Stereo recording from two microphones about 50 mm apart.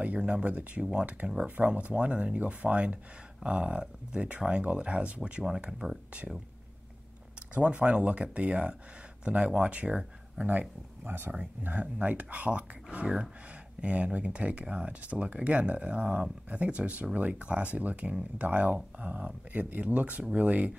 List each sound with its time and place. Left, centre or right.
0.0 s speech: right
5.6 s speech: centre
7.5 s speech: right
11.1 s speech: right
11.6 s speech: right